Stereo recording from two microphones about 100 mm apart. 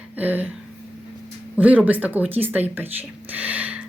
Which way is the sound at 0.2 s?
15° right (ahead or behind).